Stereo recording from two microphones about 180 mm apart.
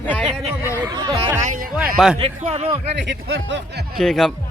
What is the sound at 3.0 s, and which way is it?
Speech, 80° right.